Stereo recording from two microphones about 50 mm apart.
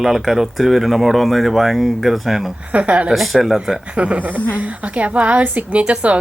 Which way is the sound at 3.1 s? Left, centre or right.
Centre.